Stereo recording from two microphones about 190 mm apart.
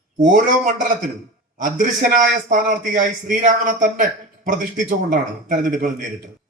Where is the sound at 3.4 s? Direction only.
40° right (ahead or behind).